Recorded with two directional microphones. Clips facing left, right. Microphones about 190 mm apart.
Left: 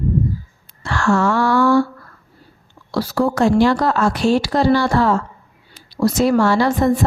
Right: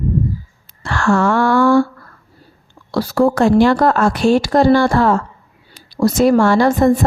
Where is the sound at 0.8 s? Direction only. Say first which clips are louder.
Right 2 dB; 55° right (ahead or behind).